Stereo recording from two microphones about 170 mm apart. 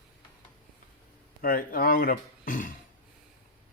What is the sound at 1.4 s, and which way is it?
Speech, 55° left (ahead or behind).